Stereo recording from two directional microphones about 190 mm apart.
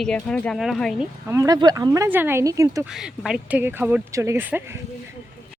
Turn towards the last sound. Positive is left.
turn(degrees=-10)  # may be behind; listen again after turning